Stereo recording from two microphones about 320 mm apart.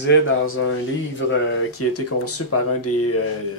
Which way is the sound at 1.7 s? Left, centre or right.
Left.